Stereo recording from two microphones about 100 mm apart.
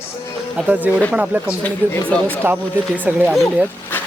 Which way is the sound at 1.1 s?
10° right (ahead or behind).